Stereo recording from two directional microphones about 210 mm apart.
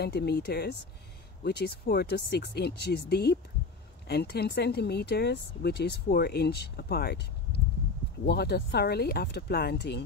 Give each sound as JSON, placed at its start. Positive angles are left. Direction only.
{"t": 0.0, "sound": "speech", "side_deg": 50}